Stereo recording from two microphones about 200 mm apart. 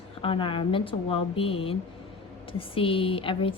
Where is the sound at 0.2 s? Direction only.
25° left (ahead or behind).